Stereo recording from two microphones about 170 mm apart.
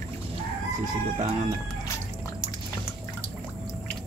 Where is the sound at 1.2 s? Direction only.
40° right (ahead or behind).